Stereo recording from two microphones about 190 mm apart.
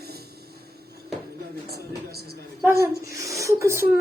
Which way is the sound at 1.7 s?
55° right (ahead or behind).